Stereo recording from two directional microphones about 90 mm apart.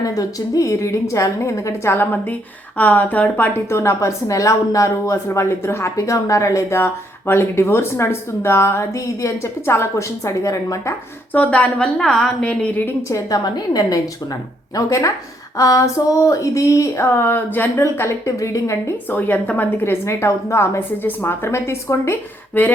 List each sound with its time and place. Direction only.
0.0 s a woman's voice: 40° left (ahead or behind)
11.3 s a woman's voice: 15° left (ahead or behind)
13.1 s a woman's voice: 35° left (ahead or behind)
19.1 s a woman's voice: 20° left (ahead or behind)